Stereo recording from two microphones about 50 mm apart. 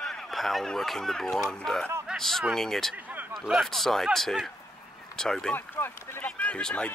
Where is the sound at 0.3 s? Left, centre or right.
Centre.